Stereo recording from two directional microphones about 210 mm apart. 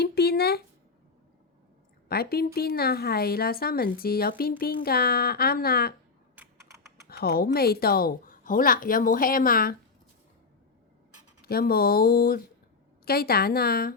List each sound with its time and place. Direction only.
0.0 s a sound: 50° left (ahead or behind)
2.0 s speech: 45° left (ahead or behind)
7.1 s speech: 45° left (ahead or behind)
11.4 s speech: 45° left (ahead or behind)